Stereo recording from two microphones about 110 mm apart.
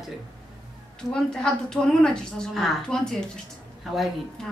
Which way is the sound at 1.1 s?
5° left (ahead or behind).